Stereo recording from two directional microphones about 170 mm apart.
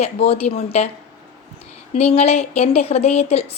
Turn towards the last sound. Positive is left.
turn(degrees=40)  # may be behind; listen again after turning